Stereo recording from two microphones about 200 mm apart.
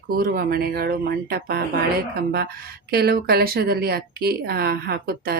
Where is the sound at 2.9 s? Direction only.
50° right (ahead or behind).